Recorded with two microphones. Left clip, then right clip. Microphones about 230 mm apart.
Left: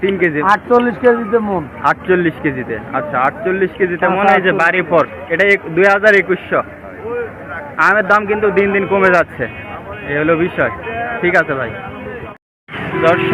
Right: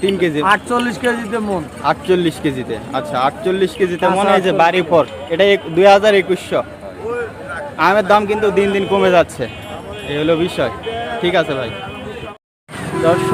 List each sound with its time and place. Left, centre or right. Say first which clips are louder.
0.0 s speech: left 1 dB; right
0.4 s speech: left 4 dB; centre
1.8 s speech: left 2 dB; centre
7.8 s speech: left 1 dB; centre